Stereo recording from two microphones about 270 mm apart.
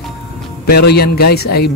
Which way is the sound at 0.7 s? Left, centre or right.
Left.